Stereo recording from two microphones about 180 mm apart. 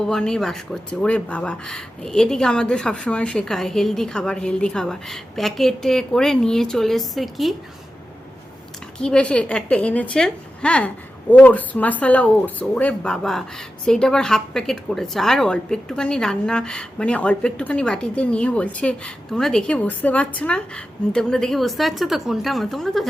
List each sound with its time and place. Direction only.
0.1 s a woman's voice: 5° left (ahead or behind)
9.0 s a woman's voice: 5° left (ahead or behind)